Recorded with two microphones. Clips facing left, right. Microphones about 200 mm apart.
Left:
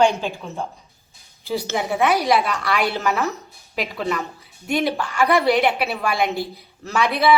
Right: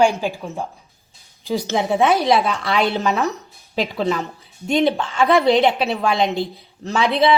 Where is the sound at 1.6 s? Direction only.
25° right (ahead or behind).